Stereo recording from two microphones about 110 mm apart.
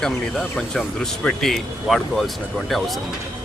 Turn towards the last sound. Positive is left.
turn(degrees=0)  # may be behind; listen again after turning